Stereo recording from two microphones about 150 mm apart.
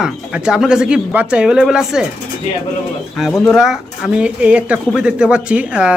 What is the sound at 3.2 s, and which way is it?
Speech, centre (ahead or behind).